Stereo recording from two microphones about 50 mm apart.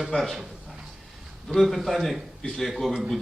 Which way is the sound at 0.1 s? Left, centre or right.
Centre.